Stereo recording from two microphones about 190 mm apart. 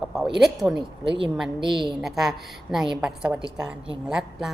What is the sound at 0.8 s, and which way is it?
Speech, 25° right (ahead or behind).